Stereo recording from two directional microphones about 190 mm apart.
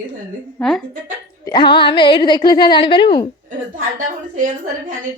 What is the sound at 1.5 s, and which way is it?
A woman's voice, 25° left (ahead or behind).